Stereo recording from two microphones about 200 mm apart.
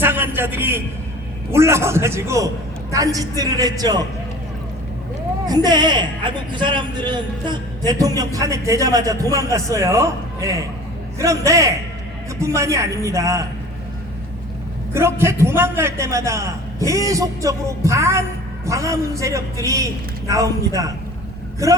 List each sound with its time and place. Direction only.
0.0 s a man's voice: 10° right (ahead or behind)
5.5 s a man's voice: 20° right (ahead or behind)
14.9 s a man's voice: 15° right (ahead or behind)